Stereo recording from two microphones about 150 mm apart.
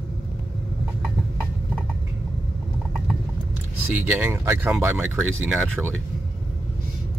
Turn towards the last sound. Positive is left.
turn(degrees=0)  # may be behind; listen again after turning